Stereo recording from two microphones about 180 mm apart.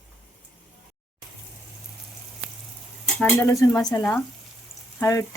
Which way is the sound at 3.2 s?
5° left (ahead or behind).